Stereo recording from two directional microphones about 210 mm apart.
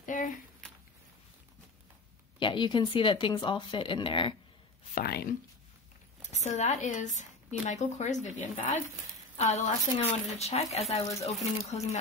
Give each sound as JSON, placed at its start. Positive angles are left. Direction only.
{"t": 0.0, "sound": "a sound", "side_deg": 40}
{"t": 2.3, "sound": "speech", "side_deg": 20}
{"t": 4.9, "sound": "speech", "side_deg": 45}
{"t": 6.2, "sound": "speech", "side_deg": 35}
{"t": 10.0, "sound": "speech", "side_deg": 30}